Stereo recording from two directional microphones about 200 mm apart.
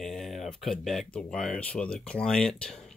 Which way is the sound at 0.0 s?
Centre (ahead or behind).